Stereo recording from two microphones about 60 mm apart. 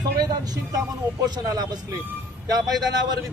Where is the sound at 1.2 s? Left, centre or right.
Right.